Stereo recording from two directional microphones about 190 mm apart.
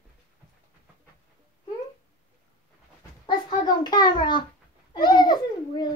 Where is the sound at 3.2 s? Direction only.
20° left (ahead or behind).